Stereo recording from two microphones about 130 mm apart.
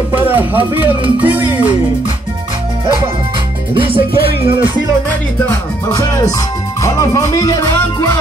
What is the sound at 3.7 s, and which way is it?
Music, 45° right (ahead or behind).